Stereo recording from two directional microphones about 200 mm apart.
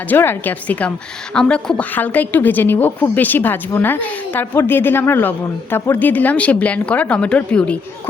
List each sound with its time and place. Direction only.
0.1 s a woman's voice: 10° left (ahead or behind)